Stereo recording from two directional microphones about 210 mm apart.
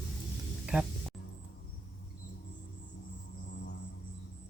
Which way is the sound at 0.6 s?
5° right (ahead or behind).